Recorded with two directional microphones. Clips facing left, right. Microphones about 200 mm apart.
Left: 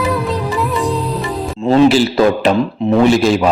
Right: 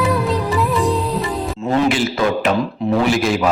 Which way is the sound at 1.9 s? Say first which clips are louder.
Left 6 dB; 30° left (ahead or behind).